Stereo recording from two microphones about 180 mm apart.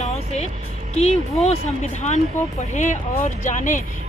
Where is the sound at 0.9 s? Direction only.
35° left (ahead or behind).